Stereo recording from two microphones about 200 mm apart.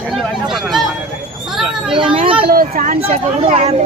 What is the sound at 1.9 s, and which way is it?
Speech, 25° right (ahead or behind).